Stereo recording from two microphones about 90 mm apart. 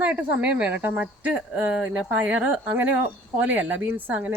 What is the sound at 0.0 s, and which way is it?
Speech, 15° right (ahead or behind).